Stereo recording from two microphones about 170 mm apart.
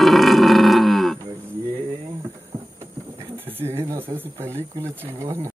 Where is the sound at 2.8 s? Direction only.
20° right (ahead or behind).